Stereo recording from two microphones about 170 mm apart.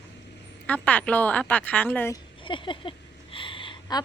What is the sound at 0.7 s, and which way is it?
A woman's voice, 10° left (ahead or behind).